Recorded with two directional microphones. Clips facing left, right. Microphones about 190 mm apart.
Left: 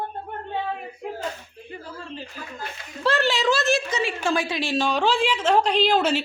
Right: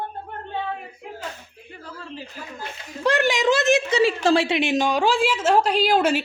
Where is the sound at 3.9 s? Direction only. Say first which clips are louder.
Right 6 dB; 35° right (ahead or behind); by 6.2 s 10° right (ahead or behind).